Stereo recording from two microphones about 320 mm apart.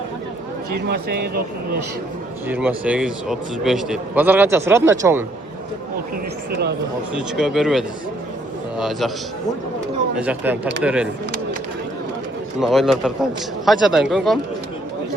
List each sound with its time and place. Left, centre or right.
0.8 s speech: right
2.5 s a man's voice: centre
7.2 s a man's voice: centre
10.2 s a man's voice: centre
12.5 s a man's voice: centre